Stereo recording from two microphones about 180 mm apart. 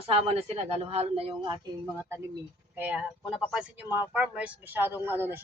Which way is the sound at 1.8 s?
15° right (ahead or behind).